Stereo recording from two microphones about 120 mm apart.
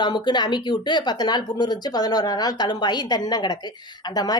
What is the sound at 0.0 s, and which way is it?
A woman's voice, 35° left (ahead or behind).